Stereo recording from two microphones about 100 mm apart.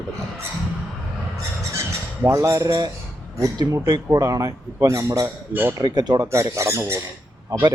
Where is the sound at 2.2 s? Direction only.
30° right (ahead or behind).